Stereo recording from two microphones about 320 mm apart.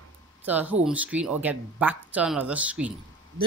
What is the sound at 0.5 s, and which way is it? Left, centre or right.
Speech, centre.